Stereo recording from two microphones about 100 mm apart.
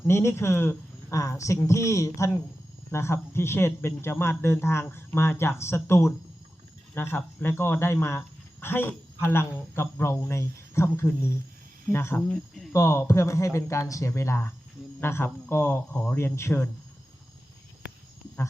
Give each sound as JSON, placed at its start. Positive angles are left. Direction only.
{"t": 0.1, "sound": "speech", "side_deg": 25}
{"t": 16.1, "sound": "speech", "side_deg": 25}